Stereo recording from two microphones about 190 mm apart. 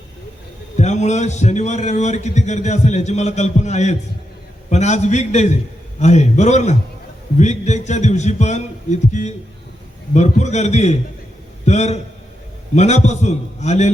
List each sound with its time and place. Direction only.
0.8 s a man's voice: 35° left (ahead or behind)